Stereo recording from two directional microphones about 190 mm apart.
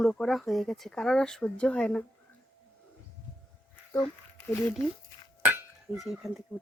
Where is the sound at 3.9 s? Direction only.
15° left (ahead or behind).